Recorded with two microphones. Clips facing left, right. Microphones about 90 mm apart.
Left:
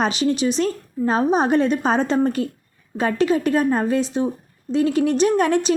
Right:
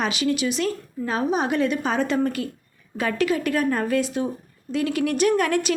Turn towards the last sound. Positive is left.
turn(degrees=25)  # may be behind; listen again after turning